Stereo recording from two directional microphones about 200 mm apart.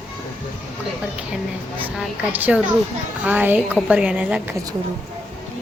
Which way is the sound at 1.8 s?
10° right (ahead or behind).